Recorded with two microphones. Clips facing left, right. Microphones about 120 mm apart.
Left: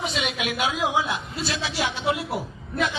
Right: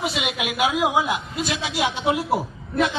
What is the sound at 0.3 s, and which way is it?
Speech, 20° right (ahead or behind).